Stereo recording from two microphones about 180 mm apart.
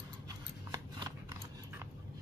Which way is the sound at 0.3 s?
20° right (ahead or behind).